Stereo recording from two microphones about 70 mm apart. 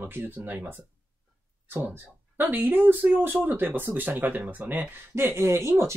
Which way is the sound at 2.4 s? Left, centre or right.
Right.